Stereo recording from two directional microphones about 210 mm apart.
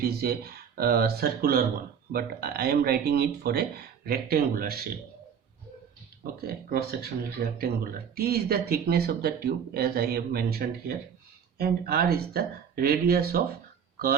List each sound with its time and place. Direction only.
0.0 s speech: 45° right (ahead or behind)
6.5 s speech: 45° right (ahead or behind)